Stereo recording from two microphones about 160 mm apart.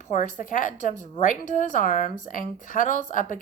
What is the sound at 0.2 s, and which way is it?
A woman's voice, 55° left (ahead or behind).